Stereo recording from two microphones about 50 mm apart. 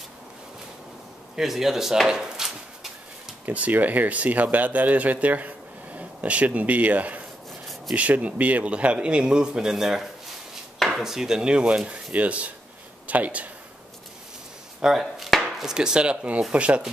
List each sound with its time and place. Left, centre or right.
1.3 s a sound: centre
3.4 s a man's voice: right
14.8 s speech: centre
15.4 s chopping: centre
16.5 s a man's voice: right